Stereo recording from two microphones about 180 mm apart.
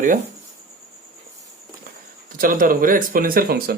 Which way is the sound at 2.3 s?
50° right (ahead or behind).